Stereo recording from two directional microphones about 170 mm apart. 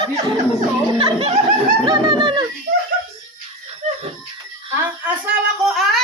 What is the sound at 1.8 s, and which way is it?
Bird, 30° right (ahead or behind).